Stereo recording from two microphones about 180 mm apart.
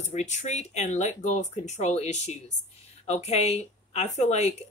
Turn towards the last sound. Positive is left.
turn(degrees=40)  # may be behind; listen again after turning